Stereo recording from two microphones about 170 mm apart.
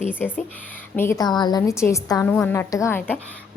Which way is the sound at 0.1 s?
10° left (ahead or behind).